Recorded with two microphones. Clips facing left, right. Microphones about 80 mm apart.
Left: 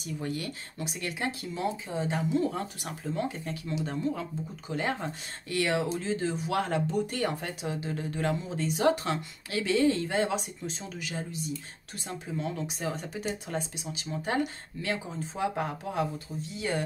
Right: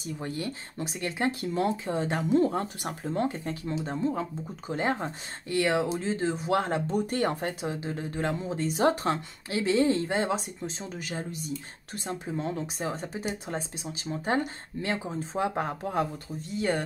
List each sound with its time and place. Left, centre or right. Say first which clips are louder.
0.0 s speech: right 1 dB; right
1.4 s speech: right 4 dB; right
2.4 s speech: right 4 dB; right